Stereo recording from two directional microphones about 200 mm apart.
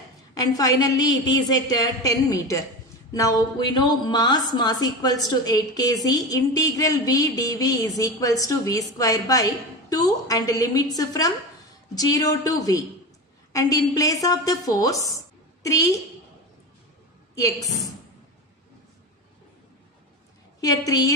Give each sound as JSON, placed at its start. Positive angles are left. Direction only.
{"t": 0.3, "sound": "a woman's voice", "side_deg": 20}
{"t": 20.6, "sound": "a woman's voice", "side_deg": 15}